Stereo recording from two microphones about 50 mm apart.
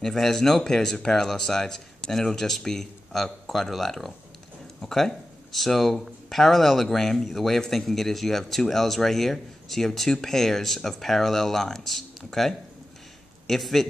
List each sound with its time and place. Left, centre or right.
0.0 s speech: centre